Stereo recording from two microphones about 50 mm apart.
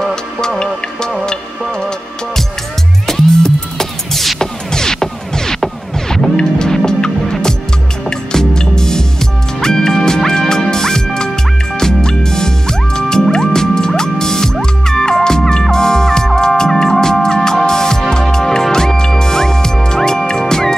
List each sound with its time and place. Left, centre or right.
0.1 s music: centre
3.1 s music: centre